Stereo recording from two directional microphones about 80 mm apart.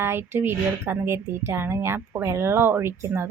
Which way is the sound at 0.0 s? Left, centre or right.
Right.